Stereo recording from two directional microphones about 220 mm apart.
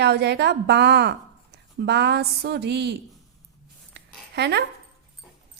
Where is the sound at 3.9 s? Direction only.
50° right (ahead or behind).